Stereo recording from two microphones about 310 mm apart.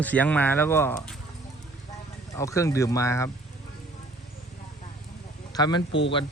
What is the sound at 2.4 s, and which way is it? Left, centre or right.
Speech, centre.